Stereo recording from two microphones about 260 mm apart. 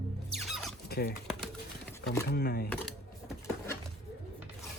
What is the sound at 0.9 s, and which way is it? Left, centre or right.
Speech, left.